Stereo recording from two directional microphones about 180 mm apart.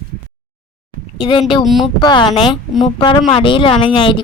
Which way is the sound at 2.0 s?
25° left (ahead or behind).